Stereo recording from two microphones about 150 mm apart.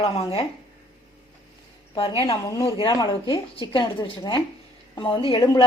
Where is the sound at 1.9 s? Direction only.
25° left (ahead or behind).